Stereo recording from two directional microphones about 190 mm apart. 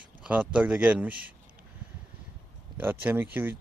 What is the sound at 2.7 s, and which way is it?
Speech, 10° right (ahead or behind).